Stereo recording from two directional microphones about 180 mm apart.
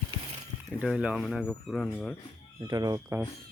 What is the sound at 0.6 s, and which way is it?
Speech, 5° right (ahead or behind).